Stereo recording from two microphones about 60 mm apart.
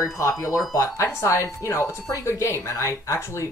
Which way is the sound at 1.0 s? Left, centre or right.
Left.